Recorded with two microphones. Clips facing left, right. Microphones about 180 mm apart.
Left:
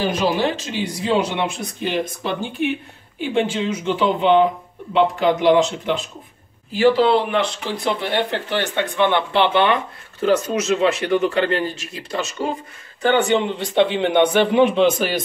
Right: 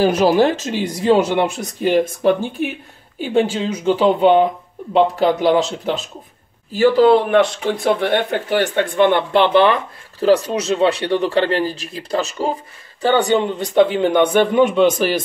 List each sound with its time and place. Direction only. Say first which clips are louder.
0.0 s speech: right 6 dB; 45° right (ahead or behind)